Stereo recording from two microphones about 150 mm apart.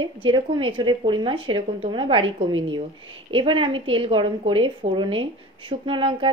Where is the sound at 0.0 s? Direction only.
35° right (ahead or behind).